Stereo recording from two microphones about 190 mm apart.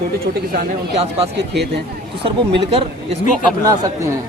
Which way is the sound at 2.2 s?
30° right (ahead or behind).